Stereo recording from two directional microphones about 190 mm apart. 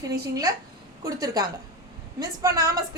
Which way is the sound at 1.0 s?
20° right (ahead or behind).